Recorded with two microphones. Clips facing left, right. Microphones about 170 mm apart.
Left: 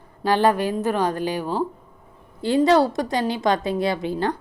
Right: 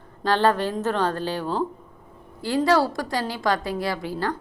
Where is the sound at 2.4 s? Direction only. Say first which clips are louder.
Left 3 dB; 20° left (ahead or behind).